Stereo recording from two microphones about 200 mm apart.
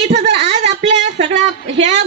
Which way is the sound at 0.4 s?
35° right (ahead or behind).